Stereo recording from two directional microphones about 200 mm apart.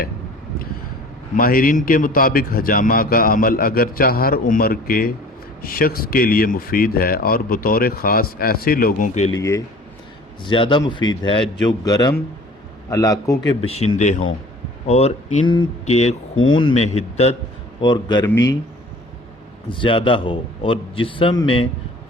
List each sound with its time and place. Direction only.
1.4 s a man's voice: 45° left (ahead or behind)
9.3 s a man's voice: 15° left (ahead or behind)
13.7 s a man's voice: 35° left (ahead or behind)
16.3 s speech: 85° left
16.6 s a man's voice: 30° left (ahead or behind)
19.7 s a man's voice: 25° left (ahead or behind)